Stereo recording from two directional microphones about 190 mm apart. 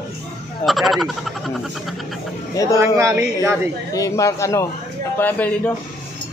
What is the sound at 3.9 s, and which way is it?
Speech, 15° left (ahead or behind).